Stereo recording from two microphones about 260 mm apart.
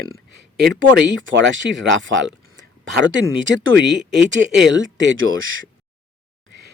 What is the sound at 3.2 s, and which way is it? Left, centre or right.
Speech, right.